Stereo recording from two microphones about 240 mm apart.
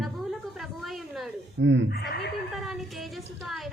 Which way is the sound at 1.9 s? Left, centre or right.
Left.